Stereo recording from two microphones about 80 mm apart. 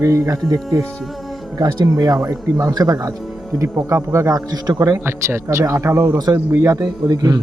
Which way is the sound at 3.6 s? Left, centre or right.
Right.